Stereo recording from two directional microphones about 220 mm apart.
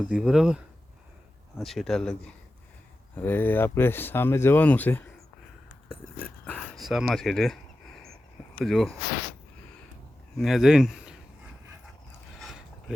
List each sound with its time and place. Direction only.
0.1 s speech: centre (ahead or behind)
6.4 s a sound: centre (ahead or behind)
8.5 s speech: centre (ahead or behind)
10.3 s speech: centre (ahead or behind)